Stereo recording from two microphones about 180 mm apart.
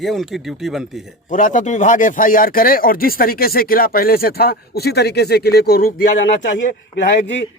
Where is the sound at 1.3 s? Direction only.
45° left (ahead or behind).